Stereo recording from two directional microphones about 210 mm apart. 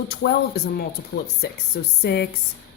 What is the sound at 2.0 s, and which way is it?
Speech, 50° left (ahead or behind).